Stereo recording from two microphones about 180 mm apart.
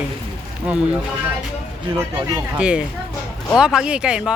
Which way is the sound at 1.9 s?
20° right (ahead or behind).